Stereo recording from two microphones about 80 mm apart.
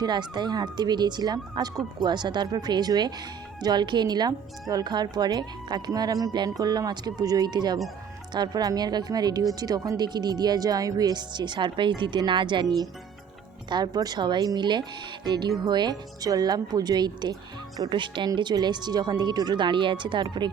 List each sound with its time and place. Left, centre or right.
0.0 s speech: right
13.7 s speech: right
17.8 s speech: right
18.3 s speech: right